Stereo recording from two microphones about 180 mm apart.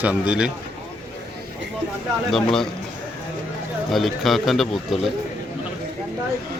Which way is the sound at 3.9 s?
Centre (ahead or behind).